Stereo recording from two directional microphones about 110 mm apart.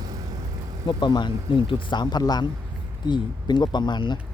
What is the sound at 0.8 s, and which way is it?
Speech, 45° left (ahead or behind).